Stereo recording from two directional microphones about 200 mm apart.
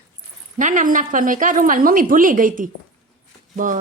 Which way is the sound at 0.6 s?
40° right (ahead or behind).